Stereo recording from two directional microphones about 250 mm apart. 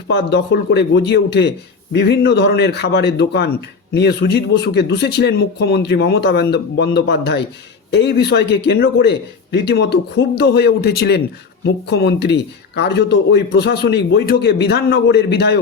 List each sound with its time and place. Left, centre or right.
0.1 s speech: left